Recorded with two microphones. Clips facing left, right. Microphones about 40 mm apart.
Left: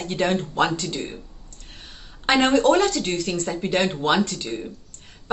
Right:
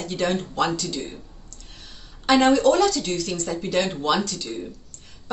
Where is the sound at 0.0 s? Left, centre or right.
Left.